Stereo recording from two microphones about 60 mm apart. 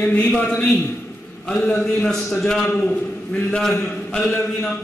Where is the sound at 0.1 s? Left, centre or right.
Centre.